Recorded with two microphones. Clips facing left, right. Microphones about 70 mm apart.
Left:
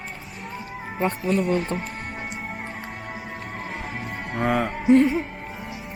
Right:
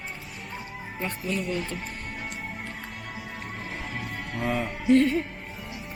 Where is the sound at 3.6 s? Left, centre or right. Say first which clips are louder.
Left 2 dB; left.